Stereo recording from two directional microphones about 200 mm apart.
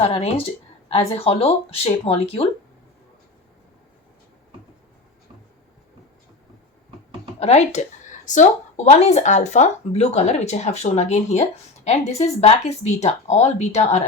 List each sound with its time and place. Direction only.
0.0 s speech: 30° left (ahead or behind)
7.3 s speech: 30° left (ahead or behind)